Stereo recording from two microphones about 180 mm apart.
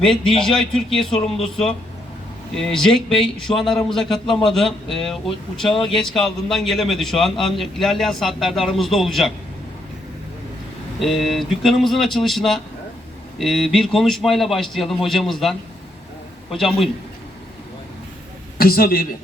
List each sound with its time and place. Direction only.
0.0 s speech: centre (ahead or behind)
2.6 s speech: centre (ahead or behind)
11.0 s a man's voice: centre (ahead or behind)
18.5 s a woman's voice: 55° left (ahead or behind)